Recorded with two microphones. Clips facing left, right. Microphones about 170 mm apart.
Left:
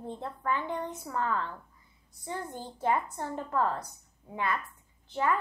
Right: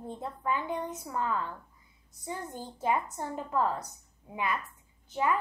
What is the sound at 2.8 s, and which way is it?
A child's voice, 15° right (ahead or behind).